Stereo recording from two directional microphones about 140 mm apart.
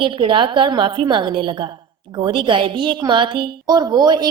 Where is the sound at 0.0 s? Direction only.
35° right (ahead or behind).